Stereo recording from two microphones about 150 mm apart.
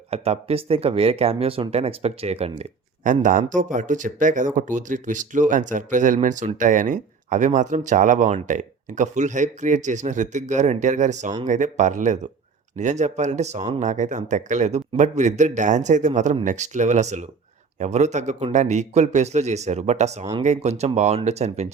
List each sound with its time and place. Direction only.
0.1 s a man's voice: 40° right (ahead or behind)